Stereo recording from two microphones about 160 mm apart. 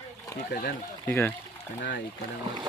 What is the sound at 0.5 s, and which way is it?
Speech, 90° left.